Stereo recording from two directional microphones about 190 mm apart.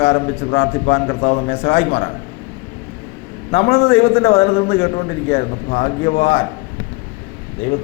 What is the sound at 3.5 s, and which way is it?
A man's voice, 35° left (ahead or behind).